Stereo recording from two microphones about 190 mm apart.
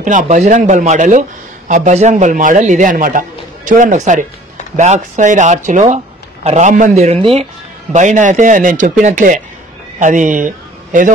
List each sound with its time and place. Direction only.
0.0 s a man's voice: 45° right (ahead or behind)